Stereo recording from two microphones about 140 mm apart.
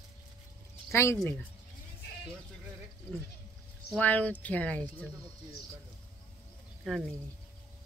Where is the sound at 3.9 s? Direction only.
10° left (ahead or behind).